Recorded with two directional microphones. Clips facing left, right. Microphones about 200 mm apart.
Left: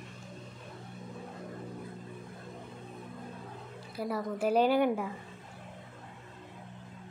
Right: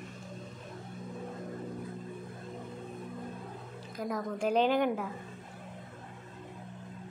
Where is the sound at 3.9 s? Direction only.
10° left (ahead or behind).